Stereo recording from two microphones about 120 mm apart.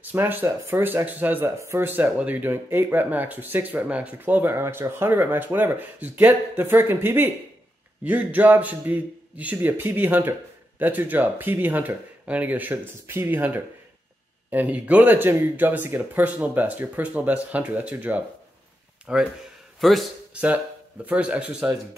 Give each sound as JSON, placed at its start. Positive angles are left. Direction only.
{"t": 0.0, "sound": "a man's voice", "side_deg": -15}
{"t": 20.3, "sound": "speech", "side_deg": -15}